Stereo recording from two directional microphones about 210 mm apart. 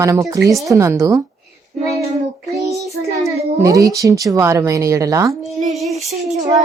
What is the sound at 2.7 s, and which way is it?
Child singing, centre (ahead or behind).